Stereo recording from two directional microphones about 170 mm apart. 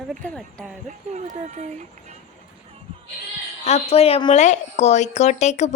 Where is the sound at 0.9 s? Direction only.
45° right (ahead or behind).